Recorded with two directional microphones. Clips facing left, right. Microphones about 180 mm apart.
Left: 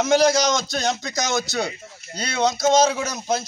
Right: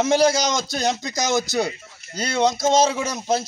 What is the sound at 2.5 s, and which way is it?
Speech, 30° right (ahead or behind).